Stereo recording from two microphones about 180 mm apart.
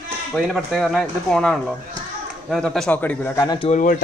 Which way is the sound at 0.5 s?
Centre (ahead or behind).